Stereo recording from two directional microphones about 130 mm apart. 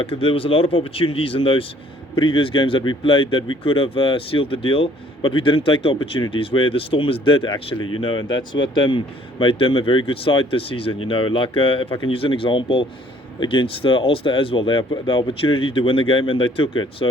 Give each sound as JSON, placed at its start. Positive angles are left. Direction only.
{"t": 0.0, "sound": "speech", "side_deg": 45}